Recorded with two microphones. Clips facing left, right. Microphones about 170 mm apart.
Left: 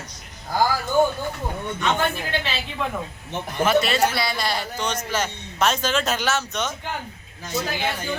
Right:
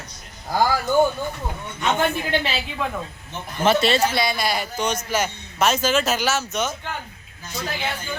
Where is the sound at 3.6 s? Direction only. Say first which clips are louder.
Right 1 dB; 30° right (ahead or behind); by 6.7 s 5° right (ahead or behind).